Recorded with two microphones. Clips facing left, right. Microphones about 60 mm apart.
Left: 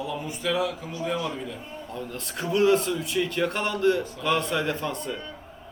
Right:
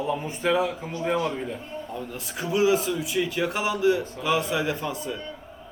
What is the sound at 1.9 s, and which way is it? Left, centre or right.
A man's voice, centre.